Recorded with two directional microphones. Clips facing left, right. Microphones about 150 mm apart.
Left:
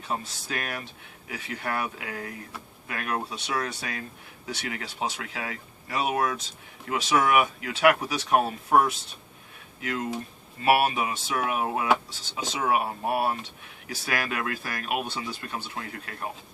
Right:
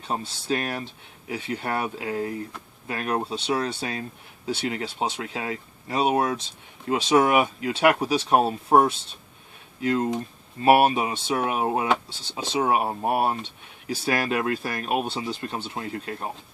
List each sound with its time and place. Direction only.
0.1 s speech: 30° right (ahead or behind)